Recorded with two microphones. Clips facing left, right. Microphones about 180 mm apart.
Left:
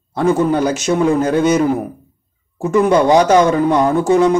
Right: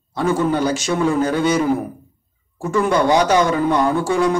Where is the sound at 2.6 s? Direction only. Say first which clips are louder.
Left 5 dB; 20° left (ahead or behind).